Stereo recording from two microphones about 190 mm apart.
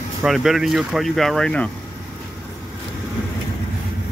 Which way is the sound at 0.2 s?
Centre (ahead or behind).